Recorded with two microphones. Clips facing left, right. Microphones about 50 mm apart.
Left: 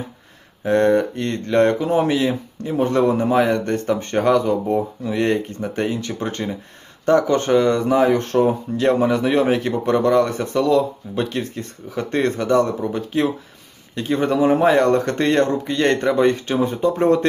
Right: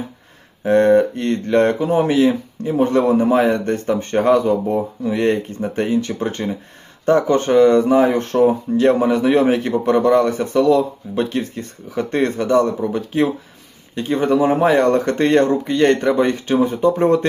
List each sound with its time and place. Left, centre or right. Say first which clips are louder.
0.6 s speech: right 3 dB; centre
15.8 s speech: right 1 dB; centre